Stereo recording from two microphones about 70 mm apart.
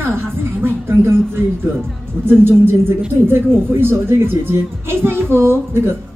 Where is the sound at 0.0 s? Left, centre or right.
Right.